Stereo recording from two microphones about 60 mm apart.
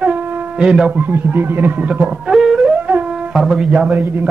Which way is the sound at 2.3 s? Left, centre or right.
Centre.